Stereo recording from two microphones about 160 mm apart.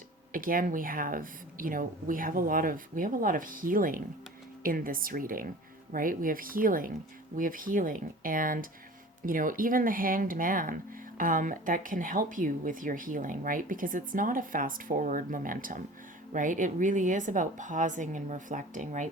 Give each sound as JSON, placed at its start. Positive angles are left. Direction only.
{"t": 0.3, "sound": "a woman's voice", "side_deg": -60}